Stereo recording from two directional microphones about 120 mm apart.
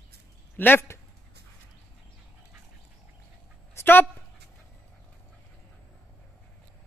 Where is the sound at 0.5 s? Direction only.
15° left (ahead or behind).